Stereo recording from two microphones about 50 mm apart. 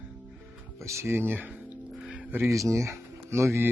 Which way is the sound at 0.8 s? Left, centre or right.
Right.